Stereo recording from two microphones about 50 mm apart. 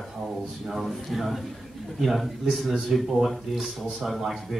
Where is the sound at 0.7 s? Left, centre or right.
Centre.